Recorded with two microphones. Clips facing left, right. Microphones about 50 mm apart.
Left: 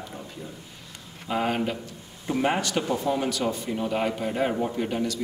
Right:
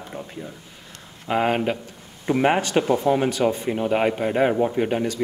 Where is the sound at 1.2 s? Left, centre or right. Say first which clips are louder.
Right 5 dB; right.